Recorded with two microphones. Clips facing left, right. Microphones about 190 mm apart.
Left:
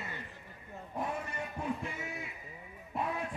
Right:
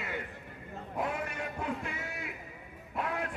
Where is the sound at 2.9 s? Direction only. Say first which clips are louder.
Right 1 dB; 80° right.